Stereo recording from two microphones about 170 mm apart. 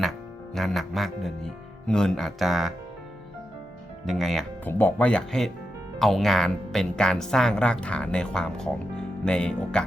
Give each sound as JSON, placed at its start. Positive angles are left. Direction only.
{"t": 0.5, "sound": "speech", "side_deg": 0}
{"t": 4.2, "sound": "speech", "side_deg": 0}